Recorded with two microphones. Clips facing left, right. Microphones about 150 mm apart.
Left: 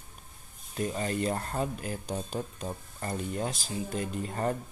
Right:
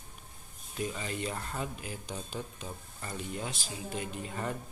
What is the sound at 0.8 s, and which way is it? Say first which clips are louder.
Speech: left 5 dB; 45° left (ahead or behind).